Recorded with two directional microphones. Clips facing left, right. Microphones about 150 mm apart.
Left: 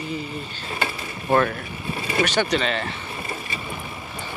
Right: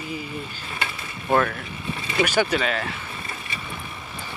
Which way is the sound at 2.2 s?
10° right (ahead or behind).